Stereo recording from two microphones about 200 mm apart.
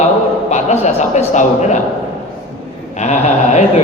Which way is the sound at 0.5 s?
35° left (ahead or behind).